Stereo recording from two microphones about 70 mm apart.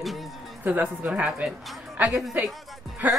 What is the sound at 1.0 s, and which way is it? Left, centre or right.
Speech, centre.